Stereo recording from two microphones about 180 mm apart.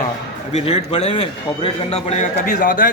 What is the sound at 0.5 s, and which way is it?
Speech, 35° left (ahead or behind).